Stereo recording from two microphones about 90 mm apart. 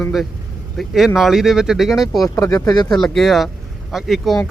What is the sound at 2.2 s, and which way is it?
Speech, 35° left (ahead or behind).